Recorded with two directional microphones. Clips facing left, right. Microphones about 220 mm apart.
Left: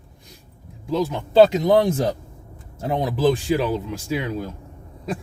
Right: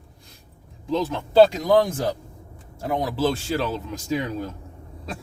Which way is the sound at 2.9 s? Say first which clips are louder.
Left 3 dB; 20° left (ahead or behind).